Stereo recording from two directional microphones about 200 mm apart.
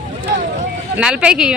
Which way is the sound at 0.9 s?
5° right (ahead or behind).